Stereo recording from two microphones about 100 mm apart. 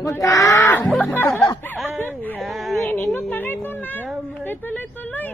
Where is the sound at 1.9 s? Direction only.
20° left (ahead or behind).